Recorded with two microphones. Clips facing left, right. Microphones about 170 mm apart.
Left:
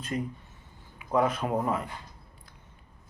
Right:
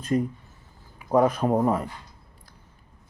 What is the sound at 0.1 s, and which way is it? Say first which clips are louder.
Speech: right 8 dB; 40° right (ahead or behind).